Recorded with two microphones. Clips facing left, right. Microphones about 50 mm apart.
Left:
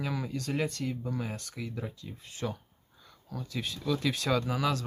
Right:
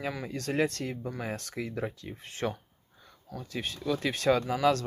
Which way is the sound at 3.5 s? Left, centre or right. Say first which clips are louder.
Right 1 dB; right.